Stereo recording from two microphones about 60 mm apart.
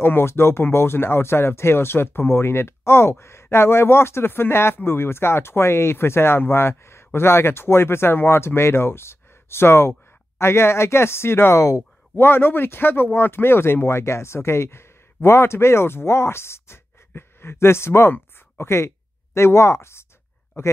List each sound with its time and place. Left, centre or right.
0.0 s speech: left